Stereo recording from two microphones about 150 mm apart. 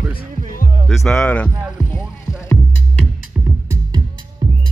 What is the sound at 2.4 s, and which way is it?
Music, 10° left (ahead or behind).